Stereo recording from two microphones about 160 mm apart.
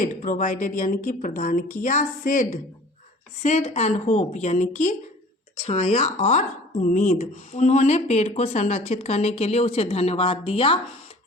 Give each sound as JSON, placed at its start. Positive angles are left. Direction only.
{"t": 0.0, "sound": "speech", "side_deg": 55}